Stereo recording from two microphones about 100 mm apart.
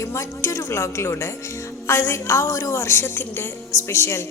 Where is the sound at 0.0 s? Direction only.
30° left (ahead or behind).